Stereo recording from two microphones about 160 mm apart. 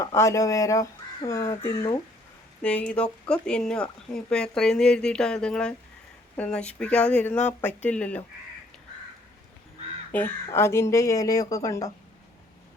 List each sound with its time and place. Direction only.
0.0 s speech: 20° left (ahead or behind)
2.6 s speech: 10° left (ahead or behind)
10.1 s speech: 10° left (ahead or behind)